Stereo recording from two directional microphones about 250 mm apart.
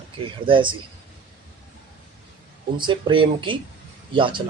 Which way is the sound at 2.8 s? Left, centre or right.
Centre.